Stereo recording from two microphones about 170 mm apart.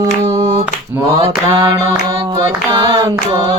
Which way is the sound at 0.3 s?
40° right (ahead or behind).